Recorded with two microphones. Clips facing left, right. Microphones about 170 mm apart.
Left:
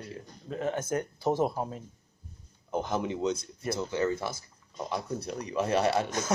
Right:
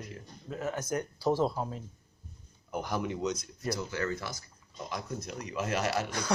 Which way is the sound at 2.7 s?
25° left (ahead or behind).